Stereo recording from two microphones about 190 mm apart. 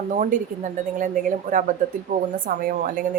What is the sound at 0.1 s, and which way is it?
A woman's voice, 45° right (ahead or behind).